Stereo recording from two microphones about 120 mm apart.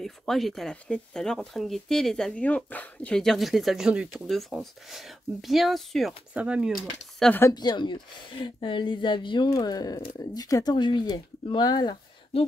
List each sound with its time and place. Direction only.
0.0 s speech: centre (ahead or behind)
7.5 s a woman's voice: 40° left (ahead or behind)